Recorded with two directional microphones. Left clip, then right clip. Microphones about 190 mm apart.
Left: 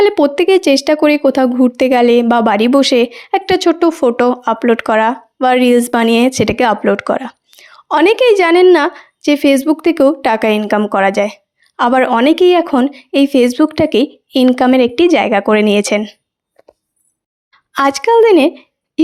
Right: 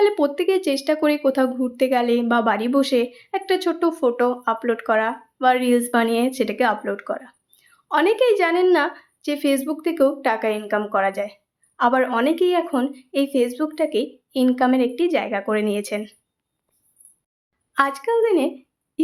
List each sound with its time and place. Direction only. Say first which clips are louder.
0.0 s speech: left 8 dB; 40° left (ahead or behind)
17.7 s speech: left 10 dB; 50° left (ahead or behind)